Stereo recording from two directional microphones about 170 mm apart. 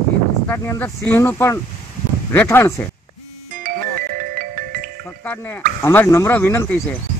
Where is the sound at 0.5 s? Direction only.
15° left (ahead or behind).